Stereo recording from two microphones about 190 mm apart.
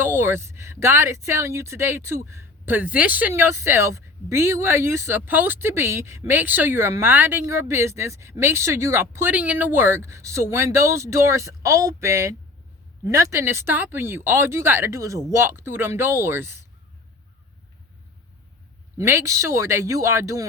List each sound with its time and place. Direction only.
0.0 s speech: 10° right (ahead or behind)
18.9 s speech: 15° right (ahead or behind)